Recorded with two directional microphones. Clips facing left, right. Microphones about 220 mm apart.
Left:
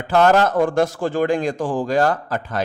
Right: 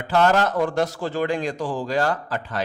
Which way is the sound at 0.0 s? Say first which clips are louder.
Left 4 dB; 50° left (ahead or behind).